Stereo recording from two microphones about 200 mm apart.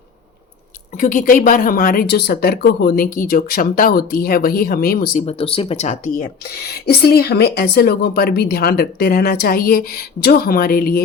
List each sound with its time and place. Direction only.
0.9 s speech: 45° left (ahead or behind)
5.2 s speech: 30° left (ahead or behind); by 11.0 s 50° left (ahead or behind)